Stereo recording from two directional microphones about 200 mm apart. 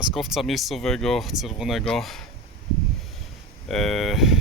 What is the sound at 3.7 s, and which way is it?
Speech, centre (ahead or behind).